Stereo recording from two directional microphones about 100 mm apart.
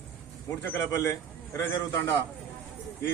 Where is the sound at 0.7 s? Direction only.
25° left (ahead or behind).